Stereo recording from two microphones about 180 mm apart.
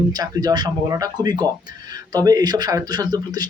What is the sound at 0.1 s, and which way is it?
Speech, 20° right (ahead or behind).